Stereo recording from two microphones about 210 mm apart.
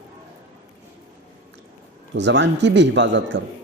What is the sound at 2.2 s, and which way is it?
Speech, 60° right (ahead or behind).